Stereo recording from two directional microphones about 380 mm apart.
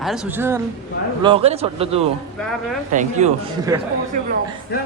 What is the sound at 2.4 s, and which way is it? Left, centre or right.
Speech, centre.